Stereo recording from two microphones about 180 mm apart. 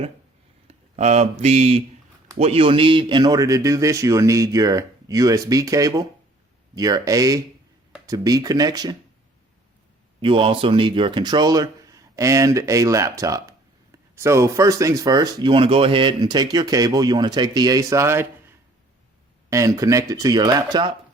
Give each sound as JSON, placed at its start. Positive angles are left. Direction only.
{"t": 0.7, "sound": "speech", "side_deg": -40}
{"t": 10.2, "sound": "speech", "side_deg": -30}